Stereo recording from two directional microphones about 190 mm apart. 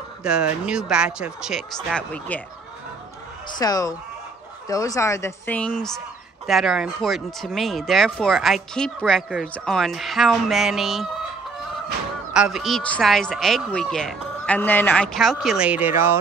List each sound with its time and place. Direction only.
0.2 s speech: 5° right (ahead or behind)
3.4 s a woman's voice: 20° left (ahead or behind); by 11.1 s centre (ahead or behind)
12.4 s speech: centre (ahead or behind)